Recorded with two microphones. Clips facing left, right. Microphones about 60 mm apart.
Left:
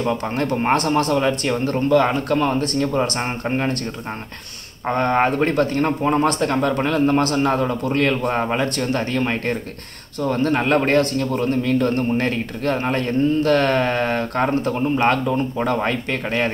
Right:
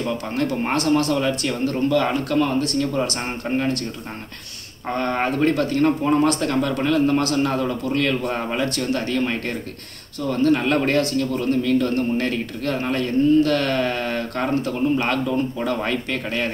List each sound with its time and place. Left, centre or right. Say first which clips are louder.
1.1 s speech: left 3 dB; left
4.8 s speech: left 4 dB; left